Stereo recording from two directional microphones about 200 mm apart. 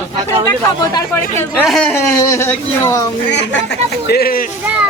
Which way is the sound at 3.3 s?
60° left (ahead or behind).